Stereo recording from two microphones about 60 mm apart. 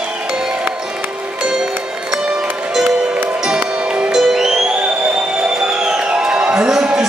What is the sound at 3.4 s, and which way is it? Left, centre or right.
Music, centre.